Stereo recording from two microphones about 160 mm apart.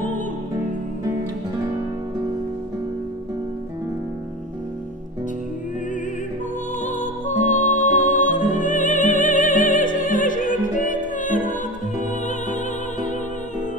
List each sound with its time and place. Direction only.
6.8 s music: 50° left (ahead or behind)